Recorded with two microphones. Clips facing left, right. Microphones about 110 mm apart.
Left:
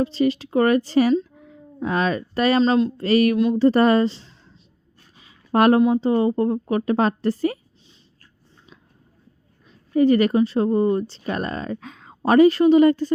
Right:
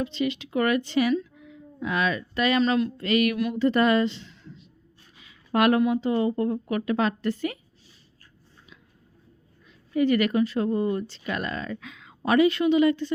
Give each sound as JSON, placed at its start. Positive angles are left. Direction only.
{"t": 0.0, "sound": "speech", "side_deg": 35}
{"t": 9.6, "sound": "speech", "side_deg": 35}